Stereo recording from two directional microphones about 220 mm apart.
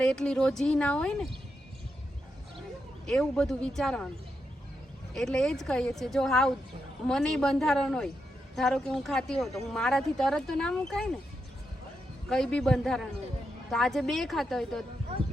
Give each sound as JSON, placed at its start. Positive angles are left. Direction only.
{"t": 0.0, "sound": "speech", "side_deg": 5}
{"t": 3.1, "sound": "speech", "side_deg": 0}
{"t": 5.1, "sound": "speech", "side_deg": 5}
{"t": 12.3, "sound": "speech", "side_deg": 5}